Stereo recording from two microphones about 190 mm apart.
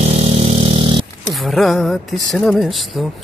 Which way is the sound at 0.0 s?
35° right (ahead or behind).